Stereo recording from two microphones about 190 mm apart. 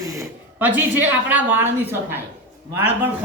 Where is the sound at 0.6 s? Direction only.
10° right (ahead or behind).